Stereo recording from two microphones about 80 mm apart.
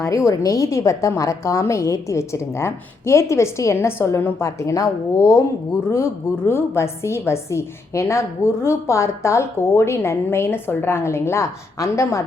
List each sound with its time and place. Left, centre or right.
0.0 s a woman's voice: left